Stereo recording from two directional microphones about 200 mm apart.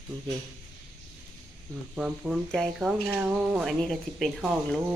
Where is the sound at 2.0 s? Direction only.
Centre (ahead or behind).